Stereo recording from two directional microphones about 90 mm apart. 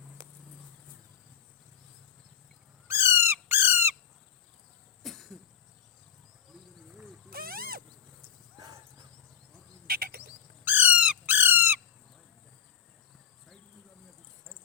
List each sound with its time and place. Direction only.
2.8 s squawk: 30° right (ahead or behind)
5.0 s cough: centre (ahead or behind)
8.5 s horse: 50° right (ahead or behind)
10.6 s squawk: 20° right (ahead or behind)